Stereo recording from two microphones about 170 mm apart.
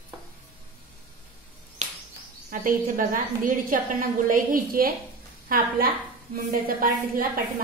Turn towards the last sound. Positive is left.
turn(degrees=-55)  # may be behind; listen again after turning